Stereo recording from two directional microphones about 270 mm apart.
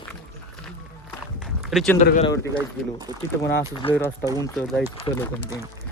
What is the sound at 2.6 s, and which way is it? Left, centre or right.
Speech, centre.